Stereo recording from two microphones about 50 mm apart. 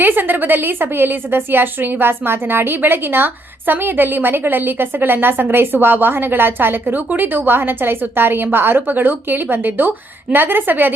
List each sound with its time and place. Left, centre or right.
0.0 s a woman's voice: right